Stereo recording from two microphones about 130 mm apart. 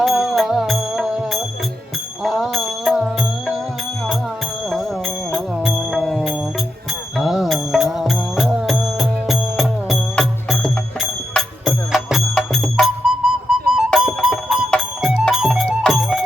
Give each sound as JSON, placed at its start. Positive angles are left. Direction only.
{"t": 0.0, "sound": "music", "side_deg": 0}
{"t": 5.3, "sound": "music", "side_deg": 0}